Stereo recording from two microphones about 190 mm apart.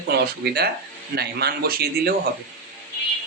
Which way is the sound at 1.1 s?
55° right (ahead or behind).